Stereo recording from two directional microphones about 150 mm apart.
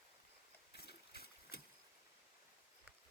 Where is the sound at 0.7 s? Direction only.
90° left.